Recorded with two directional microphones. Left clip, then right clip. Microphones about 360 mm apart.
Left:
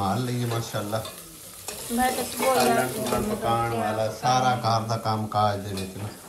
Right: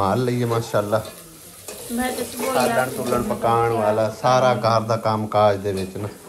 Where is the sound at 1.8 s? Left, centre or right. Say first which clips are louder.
Left 1 dB; centre.